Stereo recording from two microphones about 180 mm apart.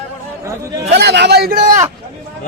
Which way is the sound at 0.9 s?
70° right (ahead or behind).